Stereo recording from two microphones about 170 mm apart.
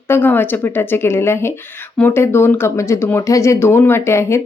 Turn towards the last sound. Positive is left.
turn(degrees=15)  # may be behind; listen again after turning